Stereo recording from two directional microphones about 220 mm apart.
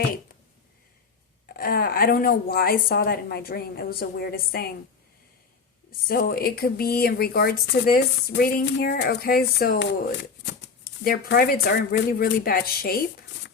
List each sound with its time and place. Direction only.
1.5 s speech: 40° left (ahead or behind)
5.9 s speech: 40° left (ahead or behind)